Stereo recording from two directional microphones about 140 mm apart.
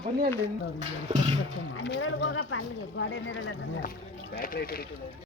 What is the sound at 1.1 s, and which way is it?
Speech, 45° right (ahead or behind).